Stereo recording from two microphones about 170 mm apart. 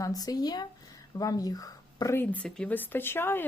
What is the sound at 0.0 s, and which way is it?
Speech, 20° left (ahead or behind).